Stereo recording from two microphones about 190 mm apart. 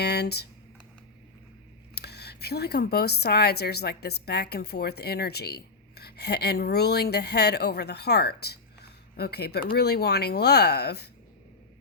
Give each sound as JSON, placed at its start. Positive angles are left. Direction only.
{"t": 0.0, "sound": "speech", "side_deg": 60}
{"t": 2.0, "sound": "speech", "side_deg": 60}